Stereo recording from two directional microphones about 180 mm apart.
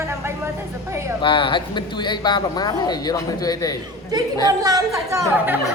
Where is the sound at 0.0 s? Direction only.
15° right (ahead or behind).